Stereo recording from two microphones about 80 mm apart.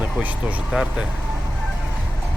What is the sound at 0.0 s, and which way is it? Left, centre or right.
Speech, centre.